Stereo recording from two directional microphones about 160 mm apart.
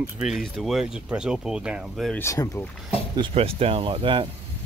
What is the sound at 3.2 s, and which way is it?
Speech, 40° right (ahead or behind).